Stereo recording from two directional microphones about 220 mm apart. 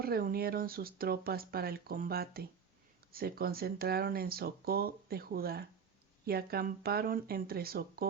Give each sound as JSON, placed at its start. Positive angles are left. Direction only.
{"t": 0.0, "sound": "speech", "side_deg": -45}